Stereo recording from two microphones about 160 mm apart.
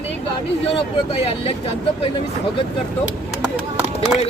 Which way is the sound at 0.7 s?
35° left (ahead or behind).